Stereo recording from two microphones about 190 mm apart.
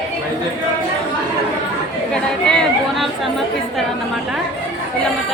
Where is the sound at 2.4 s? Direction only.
Centre (ahead or behind).